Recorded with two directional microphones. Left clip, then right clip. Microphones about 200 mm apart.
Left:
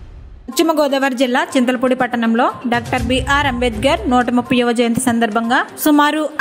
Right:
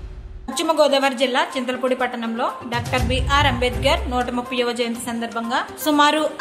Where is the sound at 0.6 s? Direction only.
30° left (ahead or behind).